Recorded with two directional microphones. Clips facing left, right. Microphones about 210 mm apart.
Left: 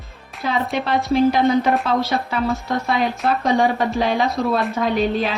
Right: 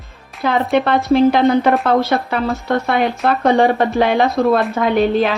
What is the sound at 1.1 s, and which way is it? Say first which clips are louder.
A woman's voice: right 4 dB; 60° right (ahead or behind).